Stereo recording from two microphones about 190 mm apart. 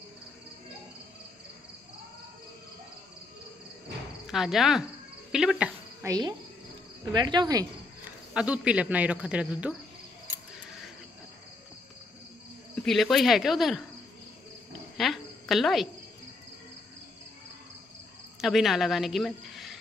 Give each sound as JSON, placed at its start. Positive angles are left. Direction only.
{"t": 4.3, "sound": "speech", "side_deg": 0}
{"t": 6.0, "sound": "cricket", "side_deg": -20}
{"t": 7.1, "sound": "speech", "side_deg": -20}
{"t": 8.3, "sound": "speech", "side_deg": -5}
{"t": 12.8, "sound": "speech", "side_deg": 0}
{"t": 15.0, "sound": "cricket", "side_deg": 0}
{"t": 18.4, "sound": "speech", "side_deg": 0}